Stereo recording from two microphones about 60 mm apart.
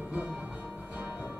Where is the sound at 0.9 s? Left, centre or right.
Right.